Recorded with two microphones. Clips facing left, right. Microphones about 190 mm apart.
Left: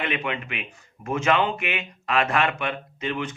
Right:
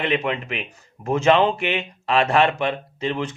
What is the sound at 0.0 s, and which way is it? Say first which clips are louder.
Speech: right 5 dB; 35° right (ahead or behind).